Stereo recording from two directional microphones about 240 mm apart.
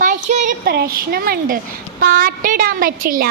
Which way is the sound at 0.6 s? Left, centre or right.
Right.